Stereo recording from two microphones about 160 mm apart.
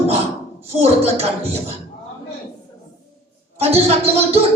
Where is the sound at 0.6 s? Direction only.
40° right (ahead or behind).